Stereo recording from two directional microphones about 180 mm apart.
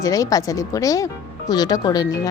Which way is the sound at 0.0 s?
20° left (ahead or behind).